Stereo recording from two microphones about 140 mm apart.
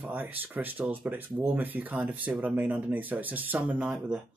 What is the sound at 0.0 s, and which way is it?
Speech, 10° right (ahead or behind).